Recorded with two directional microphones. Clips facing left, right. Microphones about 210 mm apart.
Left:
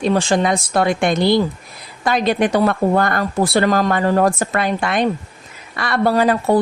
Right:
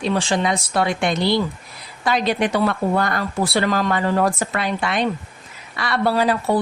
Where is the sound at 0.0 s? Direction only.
45° left (ahead or behind).